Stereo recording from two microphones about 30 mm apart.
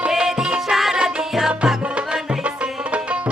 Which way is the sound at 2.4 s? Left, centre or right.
Right.